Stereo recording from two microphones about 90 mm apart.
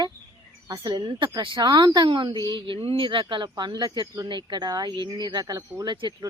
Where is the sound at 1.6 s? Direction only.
50° right (ahead or behind).